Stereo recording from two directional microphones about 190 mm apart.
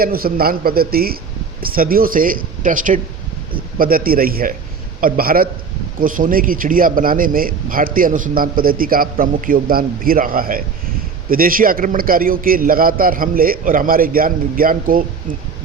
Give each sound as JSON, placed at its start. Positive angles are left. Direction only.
{"t": 0.0, "sound": "a man's voice", "side_deg": -50}